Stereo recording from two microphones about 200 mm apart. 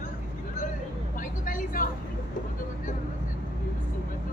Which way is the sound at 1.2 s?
40° left (ahead or behind).